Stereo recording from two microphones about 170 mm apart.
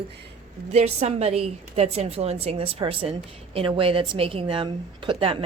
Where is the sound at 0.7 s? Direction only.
40° right (ahead or behind).